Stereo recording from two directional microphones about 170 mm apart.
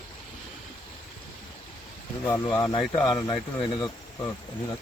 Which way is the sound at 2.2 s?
15° left (ahead or behind).